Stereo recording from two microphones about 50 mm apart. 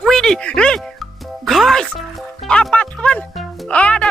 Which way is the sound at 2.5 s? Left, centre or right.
Left.